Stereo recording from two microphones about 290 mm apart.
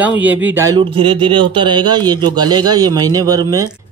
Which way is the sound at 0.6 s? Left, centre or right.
Centre.